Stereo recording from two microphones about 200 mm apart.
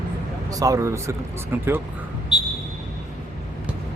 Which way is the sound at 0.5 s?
15° right (ahead or behind).